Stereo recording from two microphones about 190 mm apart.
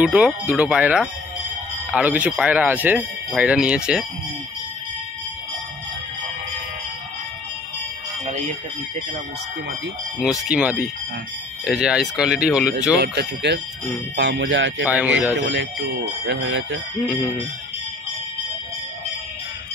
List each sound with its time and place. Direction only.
0.0 s speech: 5° right (ahead or behind)
8.3 s music: 40° right (ahead or behind)
10.5 s speech: 5° right (ahead or behind)
13.0 s speech: 60° right (ahead or behind)
14.1 s speech: 75° right (ahead or behind)
14.9 s speech: 5° right (ahead or behind)
15.4 s speech: 75° right (ahead or behind)